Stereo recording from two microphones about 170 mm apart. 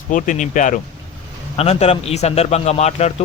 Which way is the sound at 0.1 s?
50° left (ahead or behind).